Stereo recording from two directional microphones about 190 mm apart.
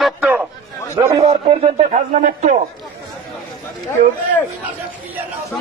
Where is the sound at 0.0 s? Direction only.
5° right (ahead or behind).